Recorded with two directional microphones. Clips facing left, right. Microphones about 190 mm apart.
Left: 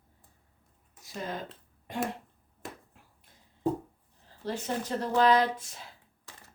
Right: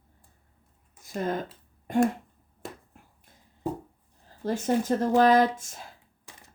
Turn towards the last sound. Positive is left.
turn(degrees=-45)  # may be behind; listen again after turning